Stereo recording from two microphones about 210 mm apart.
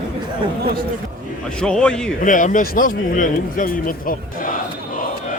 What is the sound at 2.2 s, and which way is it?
Speech, 40° left (ahead or behind).